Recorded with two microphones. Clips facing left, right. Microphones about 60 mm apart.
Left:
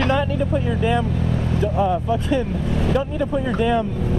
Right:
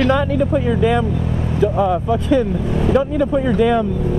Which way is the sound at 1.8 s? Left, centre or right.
Right.